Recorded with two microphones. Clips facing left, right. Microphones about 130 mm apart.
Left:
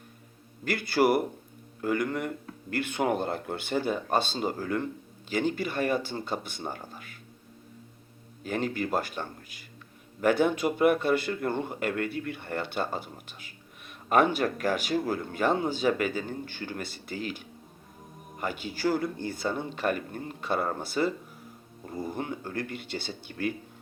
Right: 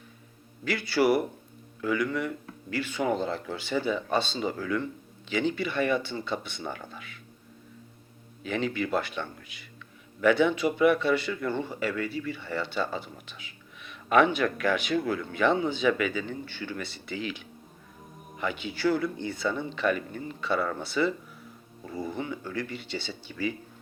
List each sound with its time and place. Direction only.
0.6 s speech: 50° left (ahead or behind)
8.4 s speech: 45° left (ahead or behind)